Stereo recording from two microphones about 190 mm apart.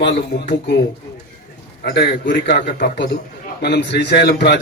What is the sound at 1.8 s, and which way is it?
A man's voice, 55° left (ahead or behind).